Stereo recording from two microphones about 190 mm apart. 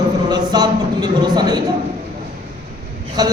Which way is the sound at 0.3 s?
20° right (ahead or behind).